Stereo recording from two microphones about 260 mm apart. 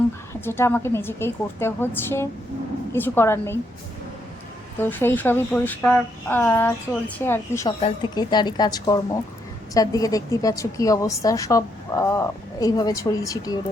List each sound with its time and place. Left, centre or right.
0.4 s a woman's voice: centre
4.8 s a woman's voice: centre
7.8 s a woman's voice: left